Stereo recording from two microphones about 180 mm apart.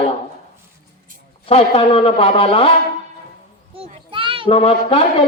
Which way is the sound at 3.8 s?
30° right (ahead or behind).